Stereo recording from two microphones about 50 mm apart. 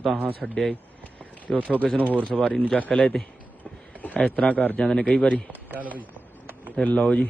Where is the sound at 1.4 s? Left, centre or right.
Left.